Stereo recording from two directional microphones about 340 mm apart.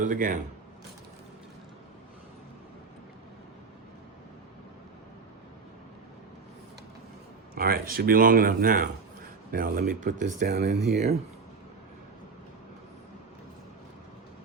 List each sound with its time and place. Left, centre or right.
0.0 s speech: right
7.5 s speech: right